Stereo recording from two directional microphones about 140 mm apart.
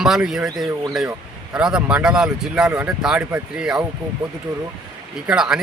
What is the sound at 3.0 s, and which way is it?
Speech, 5° right (ahead or behind).